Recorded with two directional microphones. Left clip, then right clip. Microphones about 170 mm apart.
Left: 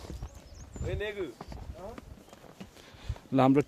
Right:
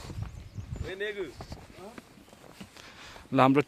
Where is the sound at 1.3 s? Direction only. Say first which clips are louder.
Even; 55° right (ahead or behind).